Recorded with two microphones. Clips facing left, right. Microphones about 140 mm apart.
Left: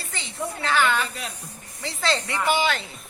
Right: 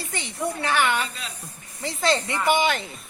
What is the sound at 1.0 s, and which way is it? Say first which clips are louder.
Speech: left 2 dB; 65° left (ahead or behind).